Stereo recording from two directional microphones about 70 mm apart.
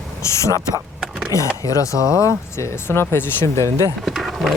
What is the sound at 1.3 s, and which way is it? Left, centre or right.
Speech, left.